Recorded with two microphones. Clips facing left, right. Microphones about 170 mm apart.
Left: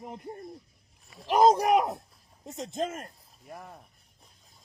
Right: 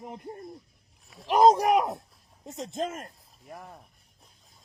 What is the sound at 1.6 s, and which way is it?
Speech, 40° right (ahead or behind).